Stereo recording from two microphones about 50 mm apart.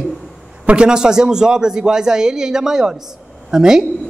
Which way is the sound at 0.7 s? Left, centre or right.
Centre.